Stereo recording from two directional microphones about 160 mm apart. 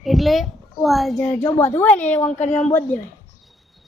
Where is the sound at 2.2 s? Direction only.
45° left (ahead or behind).